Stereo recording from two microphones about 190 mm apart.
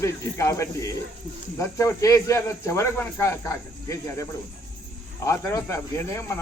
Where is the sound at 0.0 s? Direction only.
15° left (ahead or behind).